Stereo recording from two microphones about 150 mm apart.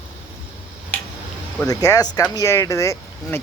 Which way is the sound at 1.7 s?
25° left (ahead or behind).